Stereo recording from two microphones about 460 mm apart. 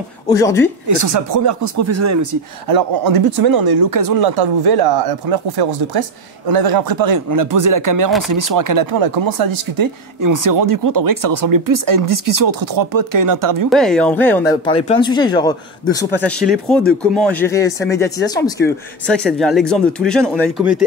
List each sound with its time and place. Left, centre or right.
0.3 s speech: centre
0.8 s speech: right
2.7 s speech: right
13.7 s speech: centre